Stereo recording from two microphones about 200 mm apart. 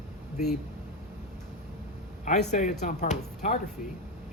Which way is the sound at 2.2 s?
35° left (ahead or behind).